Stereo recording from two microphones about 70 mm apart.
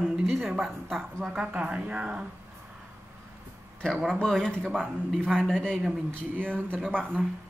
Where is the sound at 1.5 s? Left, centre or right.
Centre.